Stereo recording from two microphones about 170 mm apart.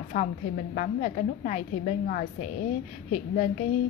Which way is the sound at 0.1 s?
55° left (ahead or behind).